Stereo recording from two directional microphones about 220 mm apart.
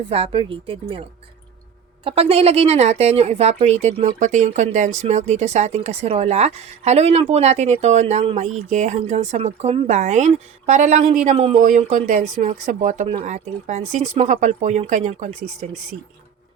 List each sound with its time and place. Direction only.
0.1 s a woman's voice: 25° right (ahead or behind)
2.0 s speech: 25° right (ahead or behind)